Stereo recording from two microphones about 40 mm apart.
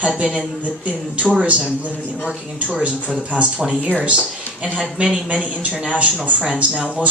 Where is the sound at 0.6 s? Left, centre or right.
Right.